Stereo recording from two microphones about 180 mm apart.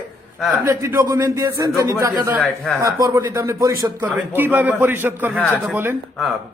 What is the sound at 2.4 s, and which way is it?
Speech, centre (ahead or behind).